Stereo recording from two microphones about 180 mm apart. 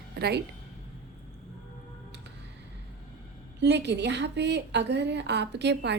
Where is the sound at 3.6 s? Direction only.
70° right (ahead or behind).